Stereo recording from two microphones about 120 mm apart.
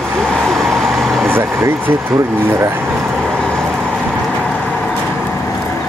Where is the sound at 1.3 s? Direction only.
15° right (ahead or behind).